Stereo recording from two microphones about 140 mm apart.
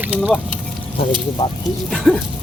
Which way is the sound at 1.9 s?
Centre (ahead or behind).